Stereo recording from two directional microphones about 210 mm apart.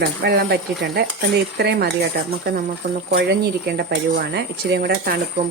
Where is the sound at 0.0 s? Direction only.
50° right (ahead or behind).